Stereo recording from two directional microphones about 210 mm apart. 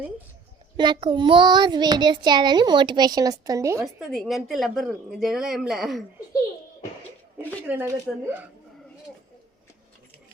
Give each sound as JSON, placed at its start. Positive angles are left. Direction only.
{"t": 0.8, "sound": "a child's voice", "side_deg": -25}
{"t": 4.1, "sound": "speech", "side_deg": 0}
{"t": 7.7, "sound": "speech", "side_deg": -10}